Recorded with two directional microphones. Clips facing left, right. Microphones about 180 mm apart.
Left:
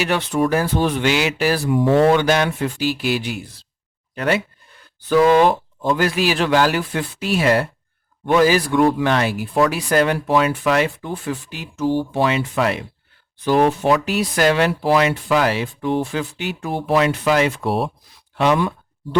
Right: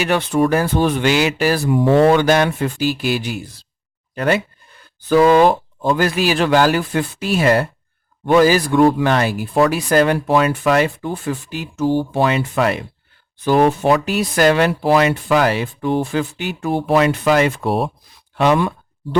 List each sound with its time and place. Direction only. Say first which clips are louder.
0.0 s speech: right 3 dB; 50° right (ahead or behind)